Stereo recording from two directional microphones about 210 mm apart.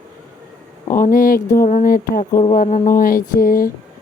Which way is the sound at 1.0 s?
40° left (ahead or behind).